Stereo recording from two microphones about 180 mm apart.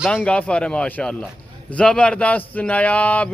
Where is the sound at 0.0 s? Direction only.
5° left (ahead or behind).